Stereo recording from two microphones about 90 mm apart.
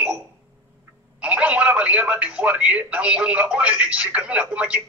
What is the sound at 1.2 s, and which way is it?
Speech, 15° right (ahead or behind).